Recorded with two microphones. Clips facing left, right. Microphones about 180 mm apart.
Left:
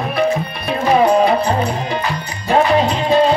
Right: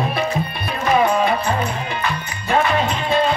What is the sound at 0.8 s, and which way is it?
Music, 35° left (ahead or behind).